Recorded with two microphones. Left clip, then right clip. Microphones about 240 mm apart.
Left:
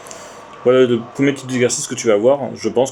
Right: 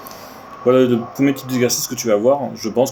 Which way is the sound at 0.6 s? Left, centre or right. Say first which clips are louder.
Left 1 dB; left.